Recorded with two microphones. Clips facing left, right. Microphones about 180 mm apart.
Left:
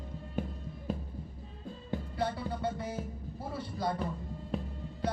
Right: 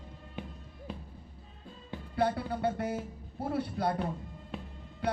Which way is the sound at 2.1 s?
60° right (ahead or behind).